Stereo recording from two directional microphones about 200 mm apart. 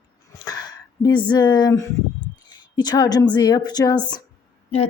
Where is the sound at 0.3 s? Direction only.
20° left (ahead or behind).